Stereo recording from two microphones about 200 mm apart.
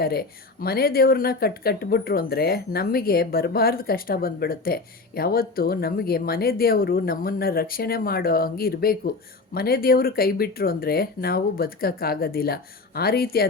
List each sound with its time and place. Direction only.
0.0 s speech: 50° left (ahead or behind)